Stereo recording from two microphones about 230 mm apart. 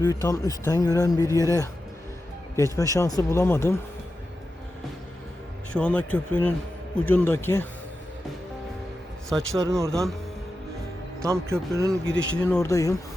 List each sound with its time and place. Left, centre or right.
0.0 s speech: centre
2.7 s speech: centre
5.7 s speech: centre
9.3 s speech: centre
9.6 s speech: centre
11.2 s speech: centre
12.1 s speech: right
12.5 s speech: centre